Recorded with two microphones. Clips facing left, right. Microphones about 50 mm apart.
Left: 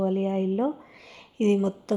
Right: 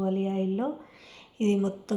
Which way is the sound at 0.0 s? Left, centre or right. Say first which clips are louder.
Left 3 dB; left.